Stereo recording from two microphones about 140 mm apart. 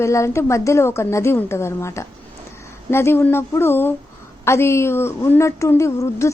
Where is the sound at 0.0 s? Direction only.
20° left (ahead or behind).